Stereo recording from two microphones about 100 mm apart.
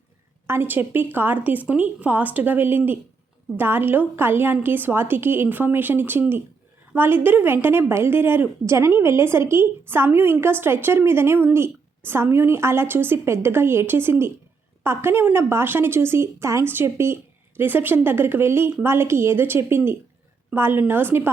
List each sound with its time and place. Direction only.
0.4 s a woman's voice: 25° right (ahead or behind)